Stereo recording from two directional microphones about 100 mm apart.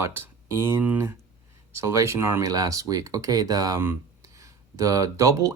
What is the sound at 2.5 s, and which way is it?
Speech, 35° right (ahead or behind).